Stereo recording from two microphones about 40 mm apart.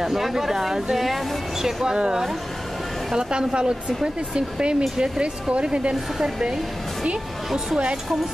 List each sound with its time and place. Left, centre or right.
0.0 s speech: centre
2.0 s speech: right
7.5 s speech: right